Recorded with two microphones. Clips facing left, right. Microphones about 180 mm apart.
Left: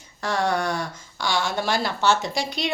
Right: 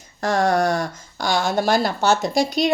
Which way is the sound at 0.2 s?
45° right (ahead or behind).